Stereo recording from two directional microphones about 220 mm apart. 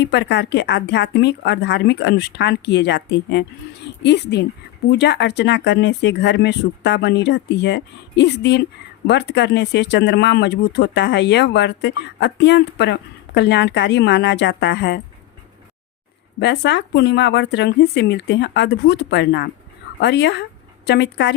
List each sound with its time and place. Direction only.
0.0 s speech: 50° left (ahead or behind)
16.4 s speech: 50° left (ahead or behind)